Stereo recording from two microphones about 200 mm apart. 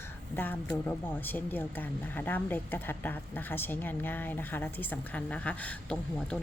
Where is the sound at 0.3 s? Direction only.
10° left (ahead or behind).